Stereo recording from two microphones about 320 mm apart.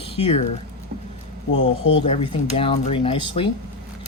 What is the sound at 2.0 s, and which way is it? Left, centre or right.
Speech, centre.